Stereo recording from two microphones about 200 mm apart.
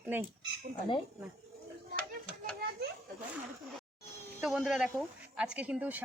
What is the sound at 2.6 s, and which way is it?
Children playing, 50° right (ahead or behind).